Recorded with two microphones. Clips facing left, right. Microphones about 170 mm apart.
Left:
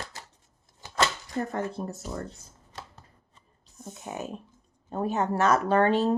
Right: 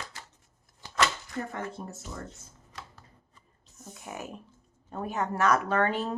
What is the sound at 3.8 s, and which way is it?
Speech, 25° left (ahead or behind).